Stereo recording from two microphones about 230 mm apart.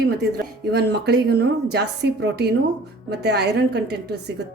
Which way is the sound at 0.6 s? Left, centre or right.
Right.